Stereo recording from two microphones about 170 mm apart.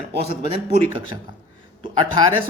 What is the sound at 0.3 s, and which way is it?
Speech, 35° right (ahead or behind).